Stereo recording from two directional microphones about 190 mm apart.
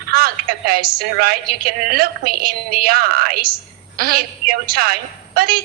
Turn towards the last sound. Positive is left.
turn(degrees=-50)  # may be behind; listen again after turning